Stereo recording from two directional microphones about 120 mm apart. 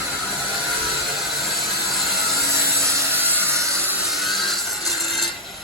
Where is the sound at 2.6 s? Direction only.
25° right (ahead or behind).